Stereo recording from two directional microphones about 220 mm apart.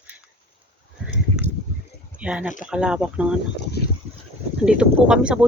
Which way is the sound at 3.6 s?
45° left (ahead or behind).